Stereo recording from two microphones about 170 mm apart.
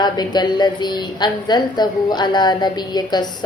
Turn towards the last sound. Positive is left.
turn(degrees=25)  # may be behind; listen again after turning